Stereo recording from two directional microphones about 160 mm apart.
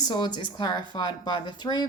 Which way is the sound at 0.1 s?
30° left (ahead or behind).